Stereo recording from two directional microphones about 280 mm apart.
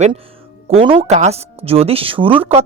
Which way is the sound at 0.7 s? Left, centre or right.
Right.